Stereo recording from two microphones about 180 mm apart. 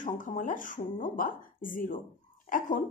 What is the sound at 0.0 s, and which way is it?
A woman's voice, 45° left (ahead or behind).